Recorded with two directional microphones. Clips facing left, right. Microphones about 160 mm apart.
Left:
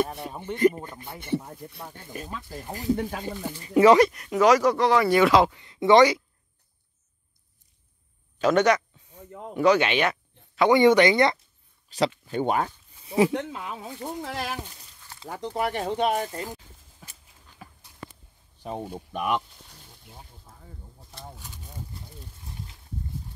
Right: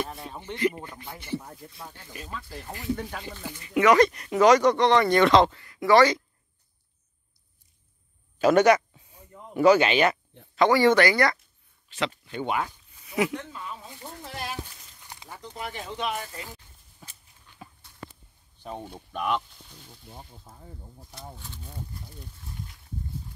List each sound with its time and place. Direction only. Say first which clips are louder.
0.0 s speech: left 6 dB; 70° left (ahead or behind)
0.6 s speech: left 6 dB; 40° left (ahead or behind)
1.1 s speech: left 5 dB; 55° left (ahead or behind)
2.7 s speech: left 5 dB; 40° left (ahead or behind)
4.0 s speech: even; centre (ahead or behind)
5.6 s speech: left 2 dB; 20° left (ahead or behind)
8.4 s speech: right 2 dB; 10° right (ahead or behind)
10.7 s speech: left 4 dB; 20° left (ahead or behind)
11.9 s speech: left 5 dB; 40° left (ahead or behind)
12.3 s a sound: left 4 dB; 40° left (ahead or behind)
13.3 s speech: left 5 dB; 85° left
15.2 s speech: left 10 dB; 70° left (ahead or behind)
15.9 s speech: left 7 dB; 50° left (ahead or behind)
18.7 s speech: left 4 dB; 10° left (ahead or behind)